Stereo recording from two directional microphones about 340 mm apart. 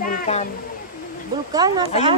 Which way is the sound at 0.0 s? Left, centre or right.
Left.